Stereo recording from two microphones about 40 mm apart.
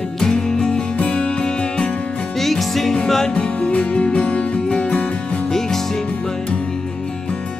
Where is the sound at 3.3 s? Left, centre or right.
Left.